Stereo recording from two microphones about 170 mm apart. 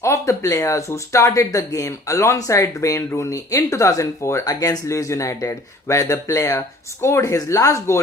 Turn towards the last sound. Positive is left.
turn(degrees=20)  # may be behind; listen again after turning